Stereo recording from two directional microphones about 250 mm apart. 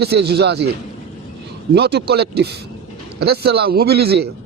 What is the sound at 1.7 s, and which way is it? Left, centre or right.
A man's voice, right.